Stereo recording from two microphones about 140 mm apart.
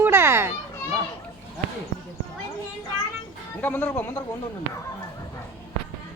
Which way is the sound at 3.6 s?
15° left (ahead or behind).